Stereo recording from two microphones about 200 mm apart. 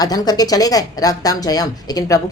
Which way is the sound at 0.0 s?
20° left (ahead or behind).